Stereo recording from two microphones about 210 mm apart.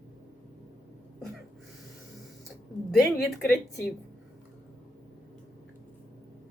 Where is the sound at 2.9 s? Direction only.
Centre (ahead or behind).